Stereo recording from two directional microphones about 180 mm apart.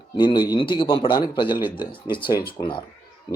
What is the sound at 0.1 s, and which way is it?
Speech, 25° left (ahead or behind).